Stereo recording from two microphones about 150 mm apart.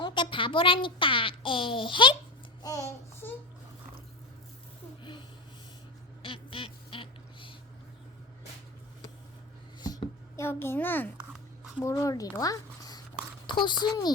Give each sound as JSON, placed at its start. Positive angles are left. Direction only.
{"t": 0.0, "sound": "a child's voice", "side_deg": 35}
{"t": 2.6, "sound": "child singing", "side_deg": 20}
{"t": 6.2, "sound": "duck", "side_deg": 35}
{"t": 9.8, "sound": "a sound", "side_deg": 25}
{"t": 11.8, "sound": "a child's voice", "side_deg": 20}